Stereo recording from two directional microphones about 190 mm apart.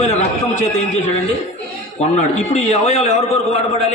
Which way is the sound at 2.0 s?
35° left (ahead or behind).